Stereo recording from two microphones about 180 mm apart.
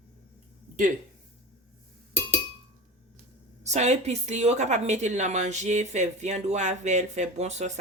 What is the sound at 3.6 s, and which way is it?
A woman's voice, 40° right (ahead or behind).